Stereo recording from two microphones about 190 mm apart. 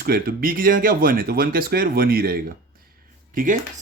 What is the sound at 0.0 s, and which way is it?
A man's voice, 50° right (ahead or behind).